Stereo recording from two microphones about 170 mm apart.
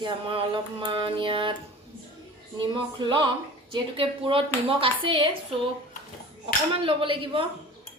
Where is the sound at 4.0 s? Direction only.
30° right (ahead or behind).